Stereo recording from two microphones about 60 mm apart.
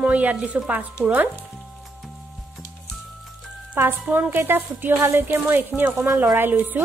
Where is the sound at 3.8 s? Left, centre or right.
Right.